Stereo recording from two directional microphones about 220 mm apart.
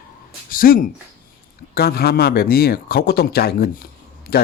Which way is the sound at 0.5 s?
40° left (ahead or behind).